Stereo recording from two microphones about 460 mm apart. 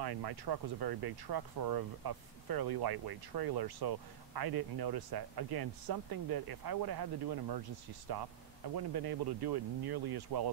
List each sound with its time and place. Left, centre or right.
0.0 s speech: right
8.7 s speech: right